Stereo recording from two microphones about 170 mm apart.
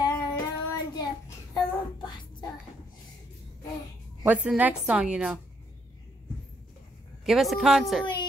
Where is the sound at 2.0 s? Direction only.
25° left (ahead or behind).